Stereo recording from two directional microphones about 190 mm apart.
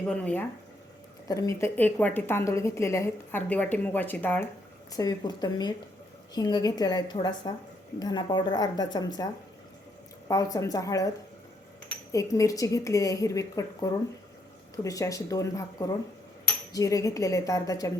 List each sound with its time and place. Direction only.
0.1 s a woman's voice: 5° left (ahead or behind)
1.3 s a woman's voice: 15° left (ahead or behind)
10.2 s a woman's voice: 15° left (ahead or behind)
12.1 s a woman's voice: 15° left (ahead or behind)